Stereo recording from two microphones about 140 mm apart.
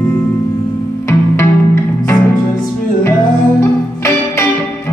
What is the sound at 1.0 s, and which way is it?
Music, 20° left (ahead or behind).